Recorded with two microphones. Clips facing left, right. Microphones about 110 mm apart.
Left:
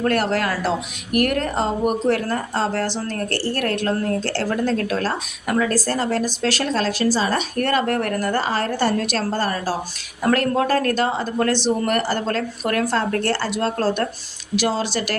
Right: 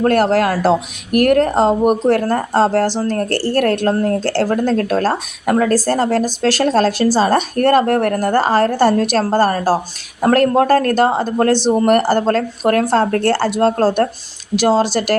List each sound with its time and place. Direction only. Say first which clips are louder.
0.0 s a woman's voice: right 7 dB; 40° right (ahead or behind)